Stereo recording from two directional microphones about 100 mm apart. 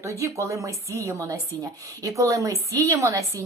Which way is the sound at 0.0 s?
30° right (ahead or behind).